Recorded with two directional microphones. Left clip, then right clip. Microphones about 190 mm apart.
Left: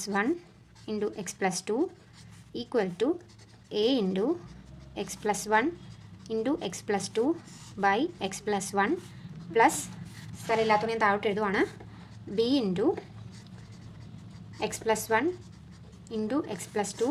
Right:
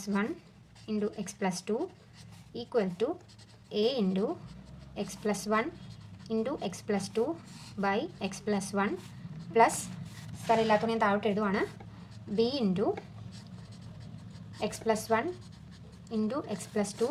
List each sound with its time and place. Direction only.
0.0 s a woman's voice: 30° left (ahead or behind)
14.6 s a woman's voice: 25° left (ahead or behind)